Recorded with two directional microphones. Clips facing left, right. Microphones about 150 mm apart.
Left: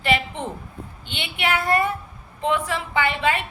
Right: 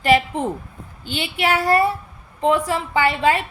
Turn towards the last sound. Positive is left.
turn(degrees=-35)  # may be behind; listen again after turning